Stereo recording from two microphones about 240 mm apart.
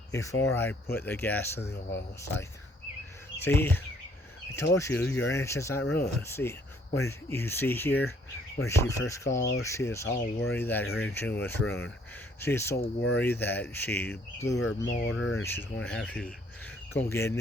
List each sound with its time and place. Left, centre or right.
0.1 s speech: centre
12.7 s speech: left
13.1 s speech: centre